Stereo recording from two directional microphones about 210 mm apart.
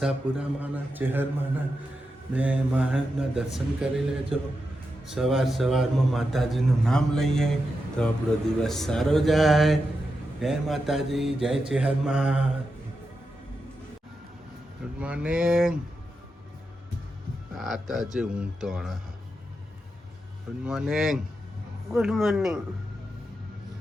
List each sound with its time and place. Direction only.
0.0 s a man's voice: 5° right (ahead or behind)
14.9 s a man's voice: 5° right (ahead or behind)
17.6 s a man's voice: centre (ahead or behind)
20.7 s a man's voice: centre (ahead or behind)